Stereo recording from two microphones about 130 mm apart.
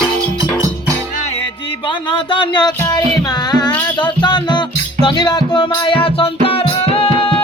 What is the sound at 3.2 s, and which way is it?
Music, 30° left (ahead or behind).